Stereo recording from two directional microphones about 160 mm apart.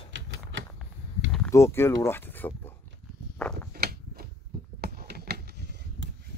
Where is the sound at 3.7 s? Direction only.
75° right (ahead or behind).